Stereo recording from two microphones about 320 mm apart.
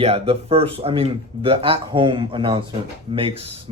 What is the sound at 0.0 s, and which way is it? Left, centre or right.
Speech, centre.